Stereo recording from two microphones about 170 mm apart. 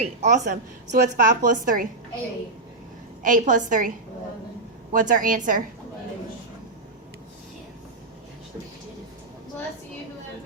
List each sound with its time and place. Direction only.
0.0 s a woman's voice: 40° right (ahead or behind)
3.2 s a woman's voice: 50° right (ahead or behind)